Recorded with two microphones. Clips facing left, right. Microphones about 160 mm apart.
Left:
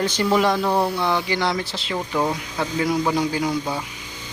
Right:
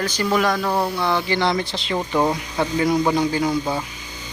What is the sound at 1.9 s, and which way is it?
Speech, 20° right (ahead or behind).